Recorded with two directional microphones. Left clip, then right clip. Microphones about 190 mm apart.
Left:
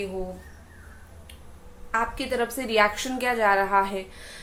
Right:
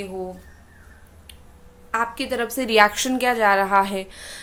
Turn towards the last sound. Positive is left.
turn(degrees=-55)  # may be behind; listen again after turning